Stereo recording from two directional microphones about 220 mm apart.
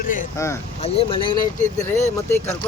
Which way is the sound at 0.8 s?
25° left (ahead or behind).